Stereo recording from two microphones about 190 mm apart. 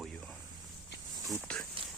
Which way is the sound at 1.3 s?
5° left (ahead or behind).